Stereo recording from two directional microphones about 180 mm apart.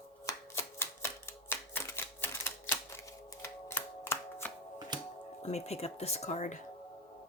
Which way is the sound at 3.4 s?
15° left (ahead or behind).